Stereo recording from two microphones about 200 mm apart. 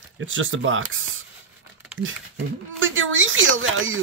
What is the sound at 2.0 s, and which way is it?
Speech, 75° right (ahead or behind).